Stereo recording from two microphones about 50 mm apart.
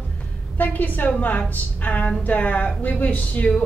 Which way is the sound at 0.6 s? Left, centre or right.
Left.